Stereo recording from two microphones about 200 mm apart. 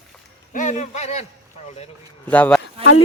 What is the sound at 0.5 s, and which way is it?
Speech, 40° left (ahead or behind).